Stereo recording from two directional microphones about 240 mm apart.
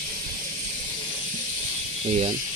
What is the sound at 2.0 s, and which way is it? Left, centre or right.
Speech, right.